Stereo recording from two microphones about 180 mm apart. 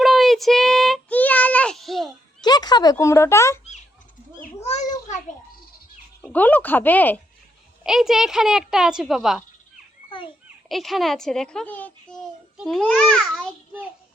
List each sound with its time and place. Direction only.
0.0 s child singing: centre (ahead or behind)
2.4 s speech: 20° left (ahead or behind)
4.4 s a sound: 40° left (ahead or behind)
6.2 s speech: 10° left (ahead or behind)
7.9 s a child's voice: centre (ahead or behind)
10.1 s a sound: 30° left (ahead or behind)
10.7 s a child's voice: centre (ahead or behind)